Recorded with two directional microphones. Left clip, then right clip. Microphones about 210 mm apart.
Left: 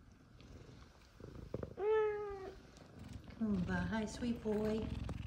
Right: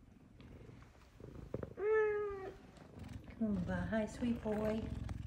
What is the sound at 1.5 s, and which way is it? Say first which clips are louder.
Cat: even; 5° left (ahead or behind).